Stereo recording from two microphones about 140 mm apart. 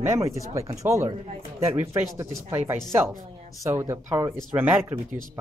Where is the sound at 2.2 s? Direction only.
20° right (ahead or behind).